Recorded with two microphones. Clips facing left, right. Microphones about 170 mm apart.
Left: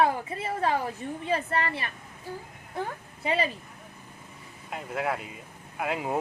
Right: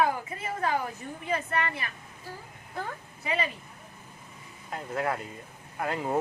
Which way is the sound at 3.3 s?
30° left (ahead or behind).